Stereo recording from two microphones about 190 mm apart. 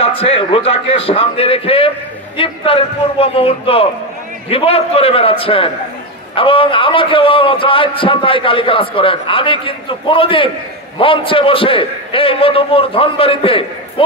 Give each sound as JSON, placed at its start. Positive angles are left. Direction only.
{"t": 0.0, "sound": "a man's voice", "side_deg": 30}